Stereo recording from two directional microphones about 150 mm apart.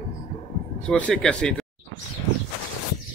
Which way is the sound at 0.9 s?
5° left (ahead or behind).